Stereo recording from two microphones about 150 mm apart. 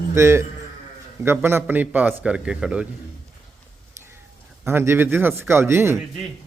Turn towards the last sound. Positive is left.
turn(degrees=-15)  # may be behind; listen again after turning